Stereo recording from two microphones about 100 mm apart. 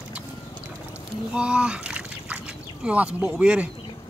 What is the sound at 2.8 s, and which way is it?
Speech, 10° right (ahead or behind).